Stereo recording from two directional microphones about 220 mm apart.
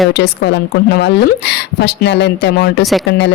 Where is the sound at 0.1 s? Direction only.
50° left (ahead or behind).